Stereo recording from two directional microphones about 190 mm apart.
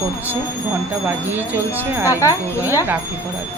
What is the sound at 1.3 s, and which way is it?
Speech, 10° right (ahead or behind).